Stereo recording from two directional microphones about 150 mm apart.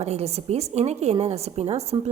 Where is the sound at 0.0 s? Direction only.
45° right (ahead or behind).